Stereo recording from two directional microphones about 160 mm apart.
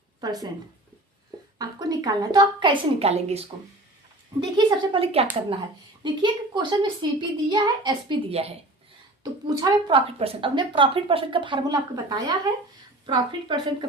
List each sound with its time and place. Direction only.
0.2 s speech: 25° right (ahead or behind)
1.5 s a woman's voice: 20° right (ahead or behind); by 3.4 s 40° right (ahead or behind)
4.4 s a woman's voice: 30° right (ahead or behind)
9.2 s a woman's voice: 25° right (ahead or behind)